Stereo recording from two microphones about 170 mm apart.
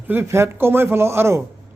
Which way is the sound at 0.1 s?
15° right (ahead or behind).